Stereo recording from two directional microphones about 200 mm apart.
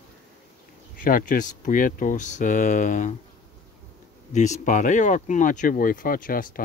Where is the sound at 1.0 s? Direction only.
40° left (ahead or behind).